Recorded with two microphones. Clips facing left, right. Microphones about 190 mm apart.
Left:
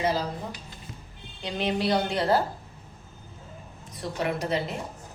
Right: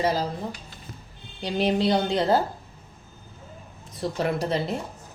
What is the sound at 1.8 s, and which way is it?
Speech, 20° right (ahead or behind).